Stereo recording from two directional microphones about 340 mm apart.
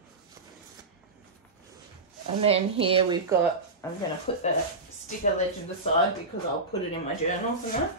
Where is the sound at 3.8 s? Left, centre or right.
Centre.